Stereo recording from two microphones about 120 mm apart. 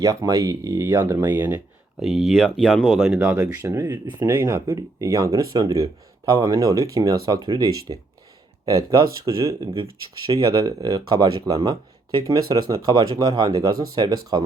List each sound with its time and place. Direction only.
0.0 s speech: 30° right (ahead or behind)
2.0 s speech: 5° right (ahead or behind)
3.7 s speech: 25° right (ahead or behind)